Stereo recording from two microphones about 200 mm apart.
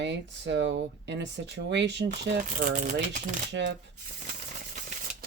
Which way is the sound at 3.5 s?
60° right (ahead or behind).